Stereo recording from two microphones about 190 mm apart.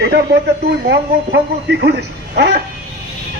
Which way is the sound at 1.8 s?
60° right (ahead or behind).